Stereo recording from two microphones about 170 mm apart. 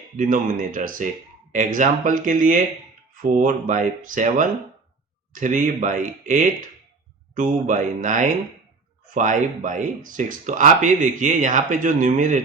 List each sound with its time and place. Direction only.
0.2 s speech: 50° right (ahead or behind)